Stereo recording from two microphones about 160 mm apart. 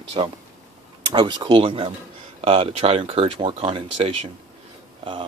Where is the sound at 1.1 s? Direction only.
30° right (ahead or behind).